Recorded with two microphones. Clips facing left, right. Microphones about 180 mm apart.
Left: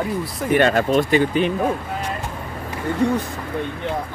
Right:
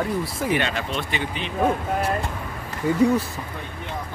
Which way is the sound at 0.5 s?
45° left (ahead or behind).